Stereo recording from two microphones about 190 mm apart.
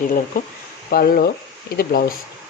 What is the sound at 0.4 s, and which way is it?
Speech, 45° left (ahead or behind).